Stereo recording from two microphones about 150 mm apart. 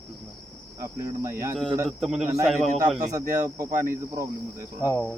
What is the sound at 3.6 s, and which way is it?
Speech, 70° right (ahead or behind).